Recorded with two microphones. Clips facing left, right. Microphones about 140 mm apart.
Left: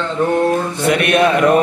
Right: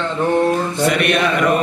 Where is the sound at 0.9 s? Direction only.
50° left (ahead or behind).